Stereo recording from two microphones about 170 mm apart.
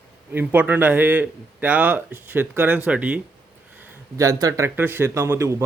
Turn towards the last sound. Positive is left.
turn(degrees=-15)  # may be behind; listen again after turning